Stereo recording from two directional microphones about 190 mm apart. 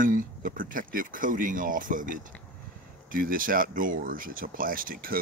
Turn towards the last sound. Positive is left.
turn(degrees=-50)  # may be behind; listen again after turning